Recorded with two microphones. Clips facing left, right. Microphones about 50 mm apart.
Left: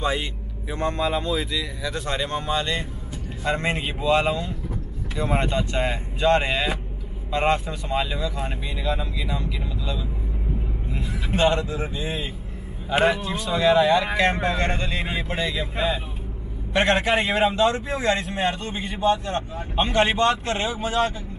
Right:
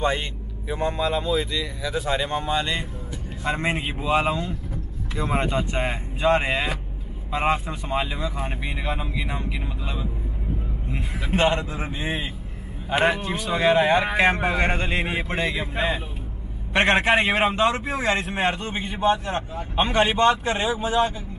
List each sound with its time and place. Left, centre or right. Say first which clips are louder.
0.0 s speech: right 1 dB; centre
5.6 s speech: left 1 dB; right
7.6 s speech: even; right
8.5 s speech: left 1 dB; right
11.3 s speech: left 1 dB; right
14.1 s speech: right 1 dB; centre
14.9 s speech: right 2 dB; right
17.0 s speech: right 1 dB; right
19.5 s speech: right 1 dB; centre